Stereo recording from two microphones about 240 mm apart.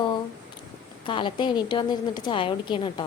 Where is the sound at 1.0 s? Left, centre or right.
Centre.